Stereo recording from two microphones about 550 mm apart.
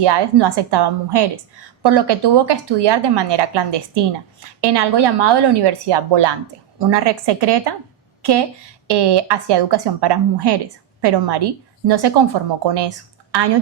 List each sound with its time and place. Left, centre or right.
0.0 s speech: right
8.9 s speech: right